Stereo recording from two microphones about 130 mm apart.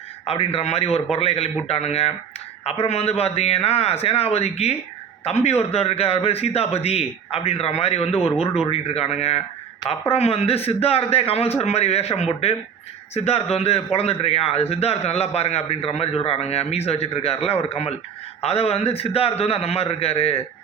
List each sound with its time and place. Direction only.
0.3 s a man's voice: 50° left (ahead or behind)